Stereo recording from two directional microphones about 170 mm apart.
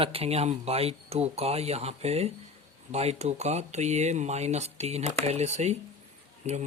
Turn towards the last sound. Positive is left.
turn(degrees=-40)  # may be behind; listen again after turning